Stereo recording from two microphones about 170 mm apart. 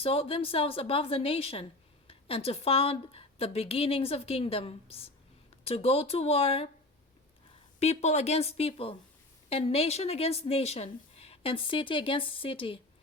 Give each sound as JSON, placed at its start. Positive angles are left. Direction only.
{"t": 0.0, "sound": "speech", "side_deg": 35}
{"t": 7.8, "sound": "speech", "side_deg": 40}